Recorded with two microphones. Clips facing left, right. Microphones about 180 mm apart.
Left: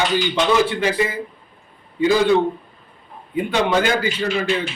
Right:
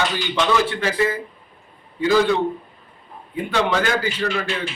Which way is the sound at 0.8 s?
15° left (ahead or behind).